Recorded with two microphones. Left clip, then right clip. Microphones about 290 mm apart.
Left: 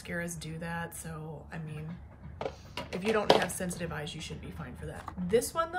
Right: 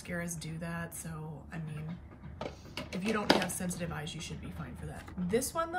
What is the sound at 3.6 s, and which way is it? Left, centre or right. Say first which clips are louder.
Speech: left 3 dB; centre.